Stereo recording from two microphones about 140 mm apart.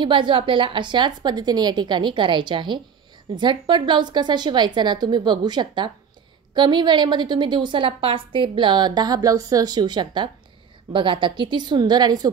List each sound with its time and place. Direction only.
0.0 s a woman's voice: 35° right (ahead or behind)